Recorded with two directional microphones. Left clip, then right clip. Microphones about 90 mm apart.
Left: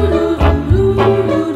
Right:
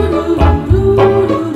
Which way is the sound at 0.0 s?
Centre (ahead or behind).